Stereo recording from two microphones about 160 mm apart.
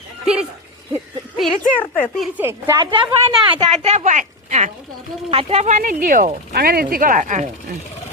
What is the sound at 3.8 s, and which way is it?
Speech, 45° right (ahead or behind).